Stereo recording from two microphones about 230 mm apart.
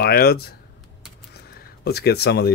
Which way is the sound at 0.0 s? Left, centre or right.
Left.